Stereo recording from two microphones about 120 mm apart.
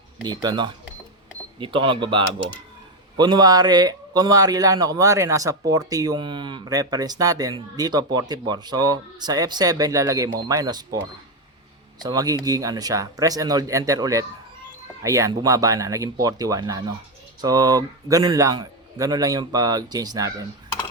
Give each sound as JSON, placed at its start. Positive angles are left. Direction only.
{"t": 0.3, "sound": "a man's voice", "side_deg": -40}
{"t": 11.9, "sound": "a man's voice", "side_deg": -35}